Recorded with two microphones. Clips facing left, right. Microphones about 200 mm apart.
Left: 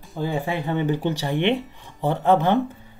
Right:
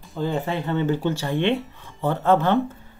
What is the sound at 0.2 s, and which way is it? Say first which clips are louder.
Speech: even; 10° left (ahead or behind).